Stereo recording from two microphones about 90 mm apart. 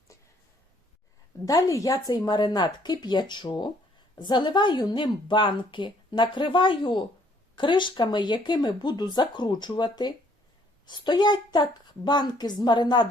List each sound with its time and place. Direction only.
1.5 s a woman's voice: 45° left (ahead or behind)